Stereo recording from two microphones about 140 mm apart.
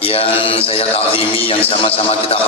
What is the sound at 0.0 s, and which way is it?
A man's voice, 45° left (ahead or behind).